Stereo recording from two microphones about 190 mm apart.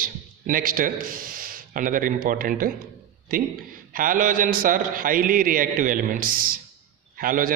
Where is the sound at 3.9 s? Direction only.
45° right (ahead or behind).